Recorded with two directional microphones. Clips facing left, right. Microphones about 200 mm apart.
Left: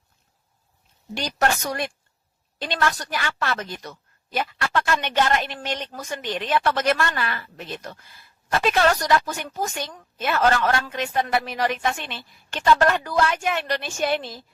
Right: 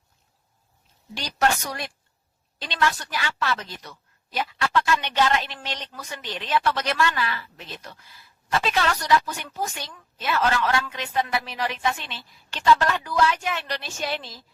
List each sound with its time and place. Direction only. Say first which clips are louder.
1.1 s a woman's voice: left 1 dB; 50° left (ahead or behind)